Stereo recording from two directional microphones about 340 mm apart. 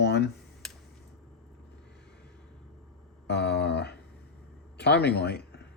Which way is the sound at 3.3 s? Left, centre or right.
Left.